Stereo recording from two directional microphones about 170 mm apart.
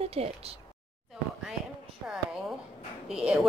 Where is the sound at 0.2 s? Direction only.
40° right (ahead or behind).